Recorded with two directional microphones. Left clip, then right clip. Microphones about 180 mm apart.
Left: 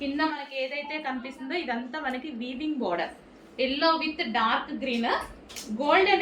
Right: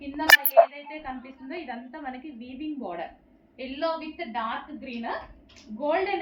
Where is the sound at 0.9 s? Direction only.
20° left (ahead or behind).